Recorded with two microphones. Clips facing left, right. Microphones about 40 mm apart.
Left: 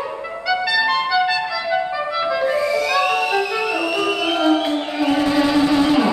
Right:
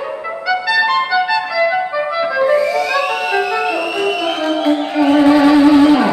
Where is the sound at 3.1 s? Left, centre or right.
Right.